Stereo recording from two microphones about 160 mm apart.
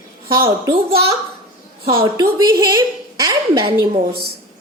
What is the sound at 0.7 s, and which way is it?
A woman's voice, 35° right (ahead or behind).